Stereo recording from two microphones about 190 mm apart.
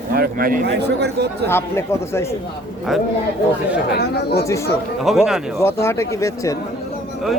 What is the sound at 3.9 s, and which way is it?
Speech, 60° left (ahead or behind).